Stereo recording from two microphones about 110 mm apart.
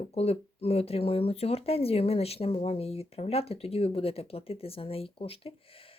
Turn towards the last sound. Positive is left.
turn(degrees=60)  # may be behind; listen again after turning